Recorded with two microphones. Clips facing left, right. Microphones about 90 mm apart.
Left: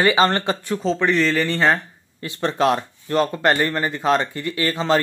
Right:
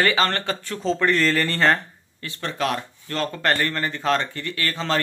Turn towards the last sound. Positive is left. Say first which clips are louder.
# left 5 dB
turn(degrees=15)  # may be behind; listen again after turning